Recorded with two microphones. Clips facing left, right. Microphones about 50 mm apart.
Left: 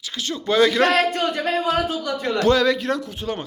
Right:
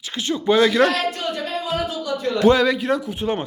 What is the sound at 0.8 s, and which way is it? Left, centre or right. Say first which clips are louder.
A man's voice: left 2 dB; left.